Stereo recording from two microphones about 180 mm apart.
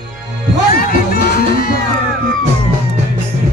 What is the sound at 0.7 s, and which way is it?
Music, 55° left (ahead or behind).